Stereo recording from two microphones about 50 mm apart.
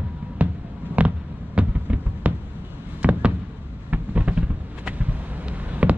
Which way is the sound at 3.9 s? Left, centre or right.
Right.